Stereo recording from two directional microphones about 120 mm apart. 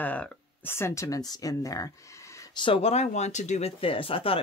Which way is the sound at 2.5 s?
45° left (ahead or behind).